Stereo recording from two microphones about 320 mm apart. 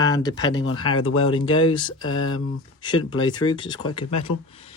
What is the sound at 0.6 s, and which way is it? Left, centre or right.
Speech, left.